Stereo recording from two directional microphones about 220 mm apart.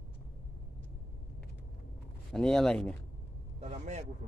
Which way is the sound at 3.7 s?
30° right (ahead or behind).